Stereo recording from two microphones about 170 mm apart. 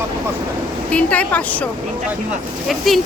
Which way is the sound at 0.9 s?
10° left (ahead or behind).